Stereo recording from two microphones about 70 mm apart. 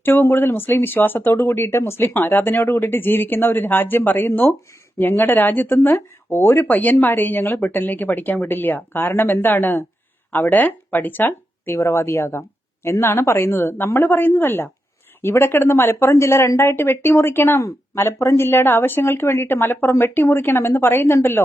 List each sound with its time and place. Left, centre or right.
0.0 s speech: left
6.7 s speech: left
17.6 s speech: left